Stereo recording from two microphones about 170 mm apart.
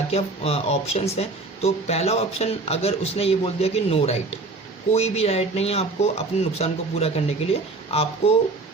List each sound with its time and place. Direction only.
0.1 s speech: 35° left (ahead or behind)